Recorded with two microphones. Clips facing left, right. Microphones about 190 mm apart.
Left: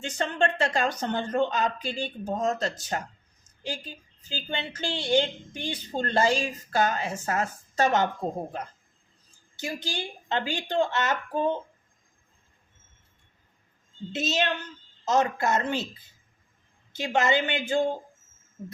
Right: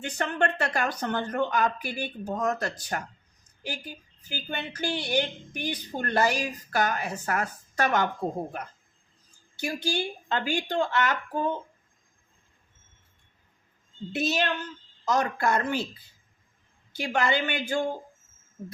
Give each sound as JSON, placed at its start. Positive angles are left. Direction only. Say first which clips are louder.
{"t": 0.0, "sound": "a woman's voice", "louder": "left 1 dB", "side_deg": 25}
{"t": 9.6, "sound": "a woman's voice", "louder": "right 4 dB", "side_deg": 20}
{"t": 14.1, "sound": "a woman's voice", "louder": "even", "side_deg": 20}
{"t": 16.9, "sound": "a woman's voice", "louder": "left 2 dB", "side_deg": 20}